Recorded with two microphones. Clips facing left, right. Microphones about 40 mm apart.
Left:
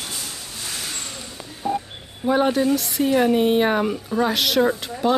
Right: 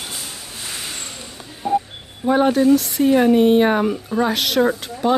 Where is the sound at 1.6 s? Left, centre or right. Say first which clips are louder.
Right 5 dB; right.